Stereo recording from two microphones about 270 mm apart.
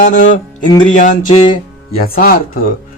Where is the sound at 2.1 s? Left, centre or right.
Left.